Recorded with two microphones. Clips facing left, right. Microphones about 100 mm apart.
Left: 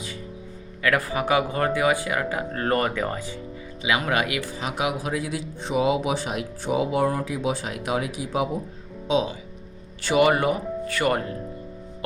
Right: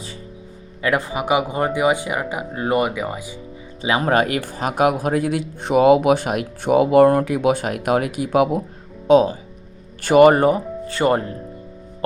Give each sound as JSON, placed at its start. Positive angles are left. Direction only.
{"t": 0.8, "sound": "speech", "side_deg": -20}
{"t": 3.8, "sound": "a man's voice", "side_deg": -35}
{"t": 9.0, "sound": "speech", "side_deg": -50}